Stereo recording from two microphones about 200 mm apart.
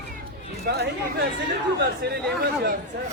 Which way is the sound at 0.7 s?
55° right (ahead or behind).